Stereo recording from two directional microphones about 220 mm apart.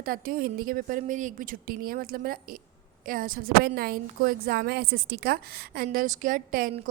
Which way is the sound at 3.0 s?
40° right (ahead or behind).